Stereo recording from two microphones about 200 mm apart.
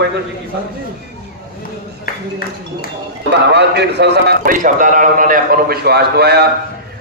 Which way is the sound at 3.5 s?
55° right (ahead or behind).